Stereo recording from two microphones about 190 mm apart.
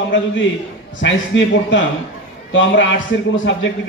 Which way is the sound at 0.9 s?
75° left (ahead or behind).